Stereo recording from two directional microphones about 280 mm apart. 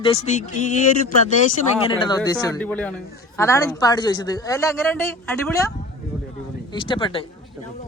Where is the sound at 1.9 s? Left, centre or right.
Centre.